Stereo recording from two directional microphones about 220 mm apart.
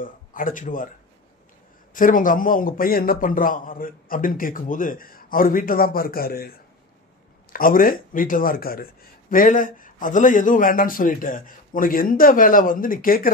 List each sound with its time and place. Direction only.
0.0 s speech: 40° left (ahead or behind)
2.0 s a man's voice: 35° left (ahead or behind)
7.5 s a man's voice: 40° left (ahead or behind)